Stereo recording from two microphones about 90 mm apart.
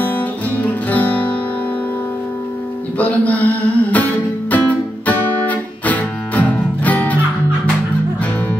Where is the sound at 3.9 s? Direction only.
20° left (ahead or behind).